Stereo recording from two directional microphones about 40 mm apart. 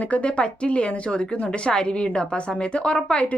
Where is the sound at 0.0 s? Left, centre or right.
Left.